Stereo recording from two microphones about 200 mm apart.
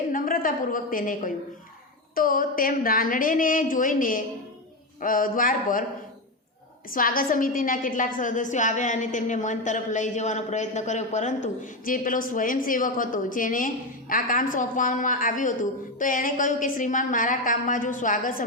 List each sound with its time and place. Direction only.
0.1 s a woman's voice: 45° left (ahead or behind)
6.9 s a woman's voice: 45° left (ahead or behind)